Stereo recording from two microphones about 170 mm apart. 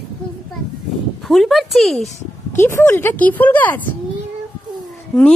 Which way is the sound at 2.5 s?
15° left (ahead or behind).